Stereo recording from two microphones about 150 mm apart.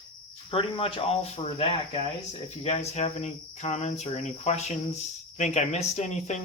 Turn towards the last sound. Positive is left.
turn(degrees=50)  # may be behind; listen again after turning